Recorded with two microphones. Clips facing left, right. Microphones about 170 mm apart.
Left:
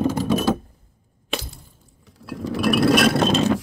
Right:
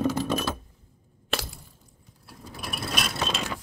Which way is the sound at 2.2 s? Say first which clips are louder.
Left 18 dB; 90° left.